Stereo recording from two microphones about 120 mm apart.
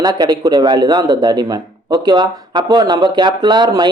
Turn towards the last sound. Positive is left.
turn(degrees=-35)  # may be behind; listen again after turning